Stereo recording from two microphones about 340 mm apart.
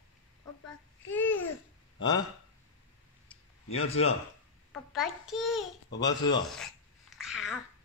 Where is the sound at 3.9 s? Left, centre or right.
Centre.